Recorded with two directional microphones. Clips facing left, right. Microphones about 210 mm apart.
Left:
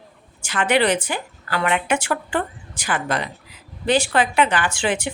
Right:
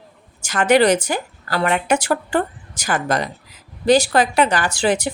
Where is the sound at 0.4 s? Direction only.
40° right (ahead or behind).